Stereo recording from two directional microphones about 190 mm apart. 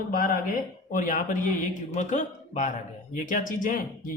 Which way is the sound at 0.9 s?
45° left (ahead or behind).